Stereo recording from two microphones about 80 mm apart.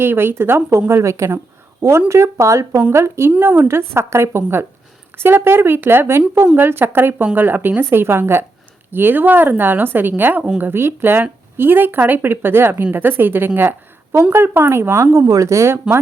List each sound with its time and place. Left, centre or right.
0.0 s speech: right